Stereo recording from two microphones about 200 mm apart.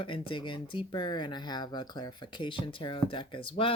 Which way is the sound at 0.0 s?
25° left (ahead or behind).